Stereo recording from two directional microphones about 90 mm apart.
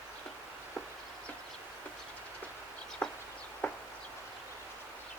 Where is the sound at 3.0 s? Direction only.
10° left (ahead or behind).